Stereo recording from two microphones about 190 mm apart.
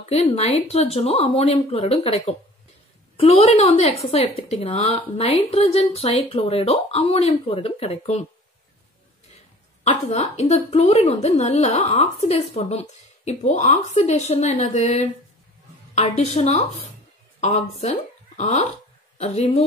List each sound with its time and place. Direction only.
0.1 s a woman's voice: 30° left (ahead or behind)
9.8 s a woman's voice: 35° left (ahead or behind)